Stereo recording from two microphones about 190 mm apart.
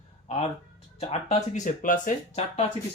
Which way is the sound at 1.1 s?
35° left (ahead or behind).